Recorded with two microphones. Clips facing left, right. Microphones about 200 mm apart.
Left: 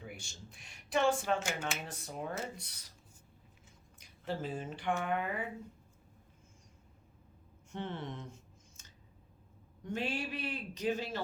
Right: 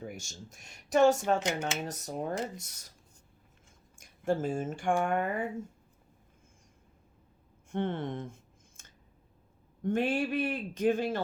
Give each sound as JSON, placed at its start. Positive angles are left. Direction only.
{"t": 0.0, "sound": "speech", "side_deg": -45}
{"t": 1.4, "sound": "speech", "side_deg": -20}
{"t": 1.8, "sound": "a man's voice", "side_deg": -40}
{"t": 3.9, "sound": "speech", "side_deg": -50}
{"t": 7.7, "sound": "a sound", "side_deg": -50}
{"t": 9.8, "sound": "a man's voice", "side_deg": -50}